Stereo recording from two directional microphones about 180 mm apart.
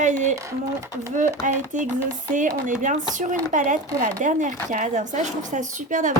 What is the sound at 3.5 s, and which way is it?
Speech, 45° right (ahead or behind).